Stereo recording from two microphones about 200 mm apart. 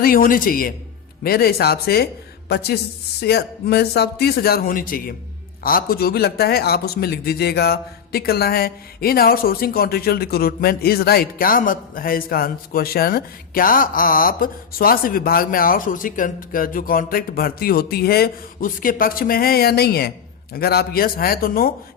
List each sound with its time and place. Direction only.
0.0 s speech: 45° left (ahead or behind)